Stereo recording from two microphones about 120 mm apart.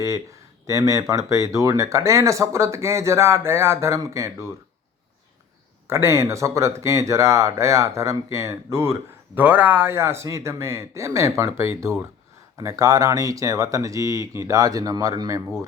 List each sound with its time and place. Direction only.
0.7 s speech: 25° right (ahead or behind)
5.9 s speech: 25° right (ahead or behind)